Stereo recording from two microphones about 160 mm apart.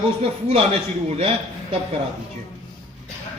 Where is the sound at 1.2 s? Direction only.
35° right (ahead or behind).